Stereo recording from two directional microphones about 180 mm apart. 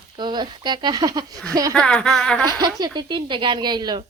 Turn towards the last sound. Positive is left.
turn(degrees=-25)  # may be behind; listen again after turning